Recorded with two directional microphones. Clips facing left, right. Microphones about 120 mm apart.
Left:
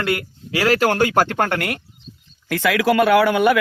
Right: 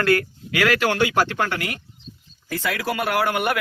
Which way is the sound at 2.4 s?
90° left.